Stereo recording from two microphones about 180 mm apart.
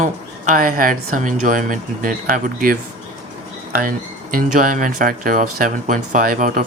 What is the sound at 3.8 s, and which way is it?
Speech, 50° right (ahead or behind).